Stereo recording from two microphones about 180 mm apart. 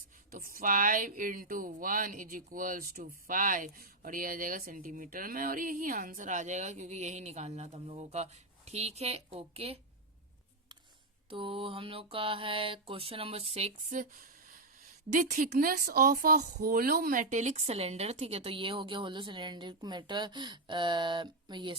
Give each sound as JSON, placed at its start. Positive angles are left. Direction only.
{"t": 0.3, "sound": "a woman's voice", "side_deg": -50}
{"t": 11.3, "sound": "speech", "side_deg": -30}